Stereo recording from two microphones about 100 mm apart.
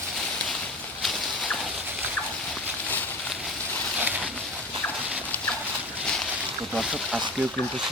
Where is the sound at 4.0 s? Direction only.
15° right (ahead or behind).